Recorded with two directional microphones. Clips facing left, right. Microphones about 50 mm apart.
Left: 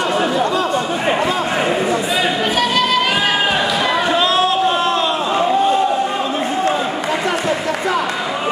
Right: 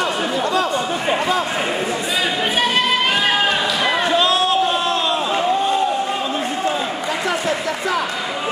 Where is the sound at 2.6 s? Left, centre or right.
Right.